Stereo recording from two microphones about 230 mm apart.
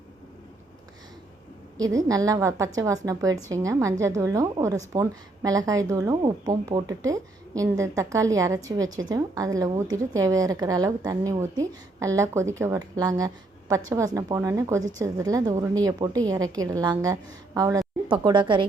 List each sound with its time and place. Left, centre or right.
1.8 s a woman's voice: centre